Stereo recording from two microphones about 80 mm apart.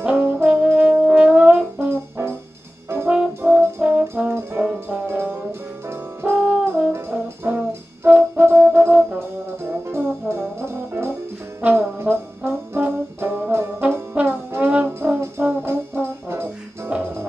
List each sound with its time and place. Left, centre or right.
0.0 s brass instrument: right
3.1 s brass instrument: centre
4.3 s brass instrument: right
4.6 s music: right
5.9 s brass instrument: right